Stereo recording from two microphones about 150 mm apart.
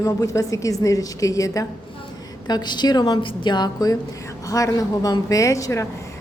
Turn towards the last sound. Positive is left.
turn(degrees=20)  # may be behind; listen again after turning